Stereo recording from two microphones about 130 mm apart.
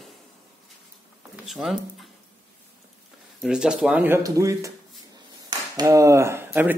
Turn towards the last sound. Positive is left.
turn(degrees=-15)  # may be behind; listen again after turning